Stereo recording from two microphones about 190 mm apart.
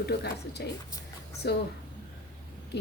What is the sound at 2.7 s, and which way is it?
Speech, 60° left (ahead or behind).